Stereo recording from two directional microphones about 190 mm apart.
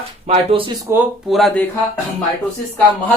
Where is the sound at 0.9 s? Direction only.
15° right (ahead or behind).